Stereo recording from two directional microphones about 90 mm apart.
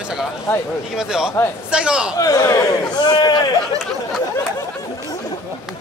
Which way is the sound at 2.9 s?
50° left (ahead or behind).